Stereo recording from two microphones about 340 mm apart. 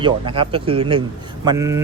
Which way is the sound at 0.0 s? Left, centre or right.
Centre.